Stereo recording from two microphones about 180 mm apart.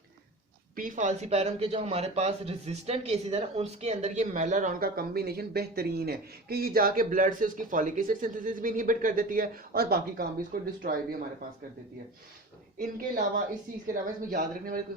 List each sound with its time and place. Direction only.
0.8 s speech: 45° right (ahead or behind)
12.8 s speech: 50° right (ahead or behind)